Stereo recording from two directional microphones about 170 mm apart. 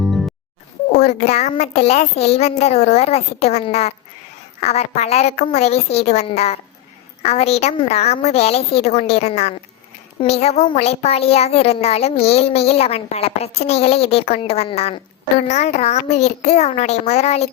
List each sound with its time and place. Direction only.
0.0 s music: centre (ahead or behind)
0.9 s a child's voice: 45° left (ahead or behind)